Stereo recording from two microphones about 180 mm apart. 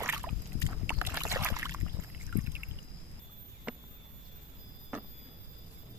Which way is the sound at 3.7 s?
5° right (ahead or behind).